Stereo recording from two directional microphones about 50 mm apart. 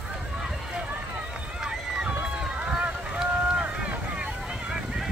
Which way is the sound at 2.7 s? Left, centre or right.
Centre.